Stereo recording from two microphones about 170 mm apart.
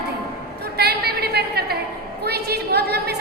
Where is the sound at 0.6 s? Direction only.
70° right (ahead or behind).